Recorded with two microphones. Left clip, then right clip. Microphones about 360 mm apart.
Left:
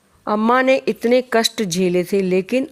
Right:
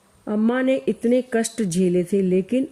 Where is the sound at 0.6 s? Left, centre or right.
Left.